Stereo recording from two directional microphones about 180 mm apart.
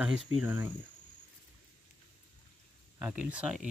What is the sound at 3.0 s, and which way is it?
Speech, 10° right (ahead or behind).